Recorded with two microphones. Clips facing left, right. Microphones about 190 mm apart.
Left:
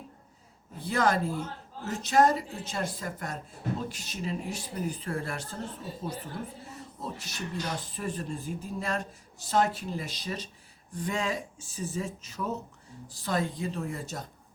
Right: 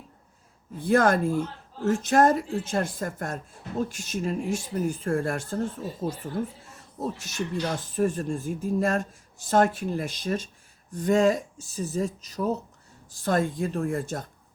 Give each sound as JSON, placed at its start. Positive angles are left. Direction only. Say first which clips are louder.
{"t": 0.8, "sound": "speech", "louder": "right 6 dB", "side_deg": -50}
{"t": 13.1, "sound": "speech", "louder": "right 5 dB", "side_deg": -50}